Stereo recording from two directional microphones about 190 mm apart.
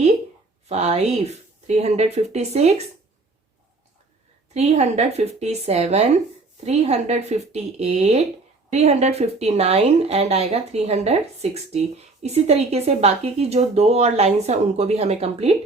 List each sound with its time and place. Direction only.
0.7 s speech: 35° right (ahead or behind)
4.5 s speech: 35° right (ahead or behind)